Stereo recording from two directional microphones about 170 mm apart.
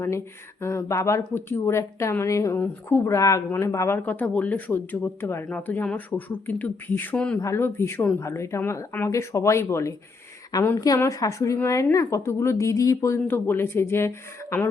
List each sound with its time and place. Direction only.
0.6 s a woman's voice: 15° left (ahead or behind)